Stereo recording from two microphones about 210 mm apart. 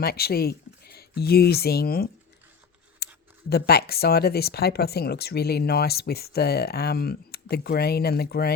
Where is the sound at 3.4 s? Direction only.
50° left (ahead or behind).